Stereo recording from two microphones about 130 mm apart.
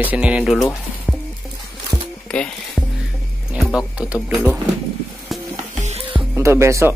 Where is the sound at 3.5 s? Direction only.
5° right (ahead or behind).